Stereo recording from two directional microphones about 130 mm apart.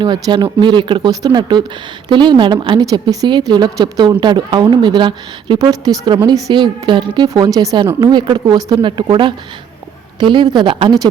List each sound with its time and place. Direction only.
0.0 s a woman's voice: 35° right (ahead or behind)